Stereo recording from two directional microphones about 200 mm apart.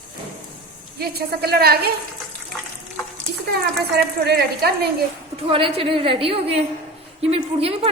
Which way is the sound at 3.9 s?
55° right (ahead or behind).